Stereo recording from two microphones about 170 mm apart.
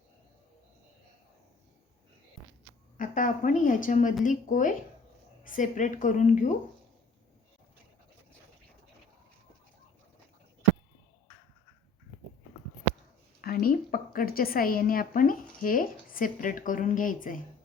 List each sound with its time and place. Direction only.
3.0 s a woman's voice: 50° left (ahead or behind)
13.4 s a woman's voice: 60° left (ahead or behind)